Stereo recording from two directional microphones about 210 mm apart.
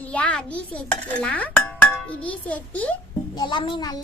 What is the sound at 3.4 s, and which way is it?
Speech, 20° left (ahead or behind).